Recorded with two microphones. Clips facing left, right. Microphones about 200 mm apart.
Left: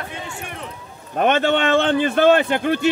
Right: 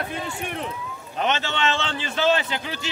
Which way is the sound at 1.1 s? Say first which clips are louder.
Left 8 dB; 55° left (ahead or behind).